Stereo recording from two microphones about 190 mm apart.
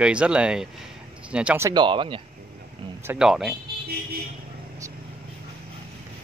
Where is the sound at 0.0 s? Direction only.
5° right (ahead or behind).